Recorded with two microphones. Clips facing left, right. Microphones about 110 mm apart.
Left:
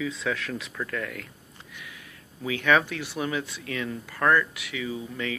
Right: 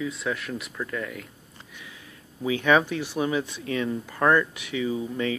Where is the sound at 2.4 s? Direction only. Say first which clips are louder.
Right 2 dB; 25° right (ahead or behind).